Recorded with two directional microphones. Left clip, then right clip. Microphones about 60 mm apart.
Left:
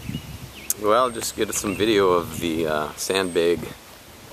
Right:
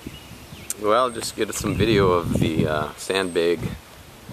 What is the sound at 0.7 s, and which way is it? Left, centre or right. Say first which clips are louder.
Speech: even; centre.